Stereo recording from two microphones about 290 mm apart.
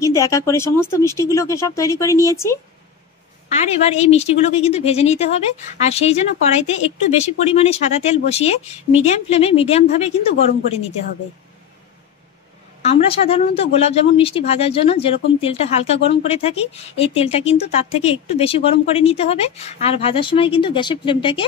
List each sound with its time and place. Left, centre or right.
0.0 s speech: centre
3.4 s speech: left
12.8 s speech: centre